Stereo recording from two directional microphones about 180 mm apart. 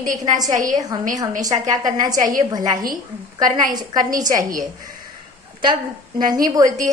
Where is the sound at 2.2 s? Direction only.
45° right (ahead or behind).